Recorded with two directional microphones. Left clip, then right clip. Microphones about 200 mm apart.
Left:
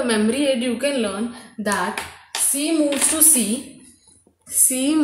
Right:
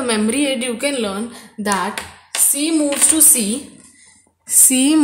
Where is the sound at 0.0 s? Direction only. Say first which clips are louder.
Right 1 dB; 50° right (ahead or behind).